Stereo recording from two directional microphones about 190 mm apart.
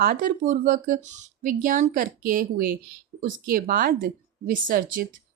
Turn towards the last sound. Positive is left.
turn(degrees=-45)  # may be behind; listen again after turning